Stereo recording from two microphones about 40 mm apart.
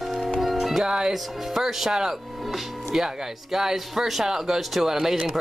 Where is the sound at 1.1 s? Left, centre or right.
Centre.